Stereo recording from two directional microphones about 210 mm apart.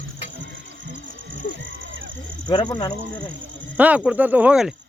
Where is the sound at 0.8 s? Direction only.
60° right (ahead or behind).